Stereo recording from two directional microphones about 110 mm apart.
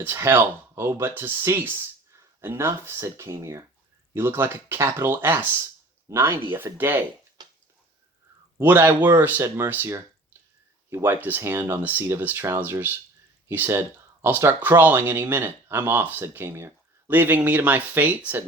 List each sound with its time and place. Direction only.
0.0 s speech: 20° right (ahead or behind)
8.5 s speech: 20° right (ahead or behind)